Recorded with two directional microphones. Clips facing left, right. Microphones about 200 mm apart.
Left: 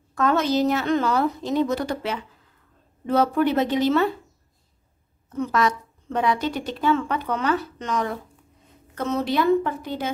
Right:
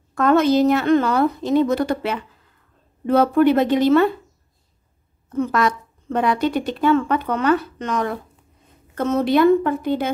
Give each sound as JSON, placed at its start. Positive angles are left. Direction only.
{"t": 0.1, "sound": "a woman's voice", "side_deg": -55}
{"t": 5.3, "sound": "a woman's voice", "side_deg": -55}